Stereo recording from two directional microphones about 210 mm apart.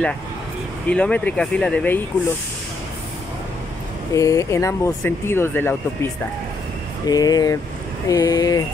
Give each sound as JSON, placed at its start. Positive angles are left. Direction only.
{"t": 0.8, "sound": "speech", "side_deg": 5}
{"t": 4.1, "sound": "speech", "side_deg": 15}
{"t": 7.1, "sound": "speech", "side_deg": 20}